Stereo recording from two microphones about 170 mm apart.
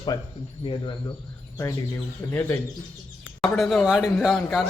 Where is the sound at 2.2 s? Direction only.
15° left (ahead or behind).